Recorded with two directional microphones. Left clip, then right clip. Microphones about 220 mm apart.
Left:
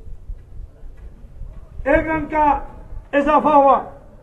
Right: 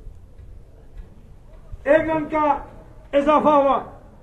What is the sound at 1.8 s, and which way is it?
A man's voice, 45° left (ahead or behind).